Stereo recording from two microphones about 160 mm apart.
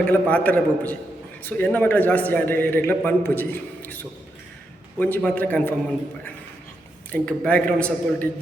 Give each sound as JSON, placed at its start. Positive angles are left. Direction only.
{"t": 0.0, "sound": "a man's voice", "side_deg": 10}
{"t": 7.1, "sound": "a man's voice", "side_deg": 10}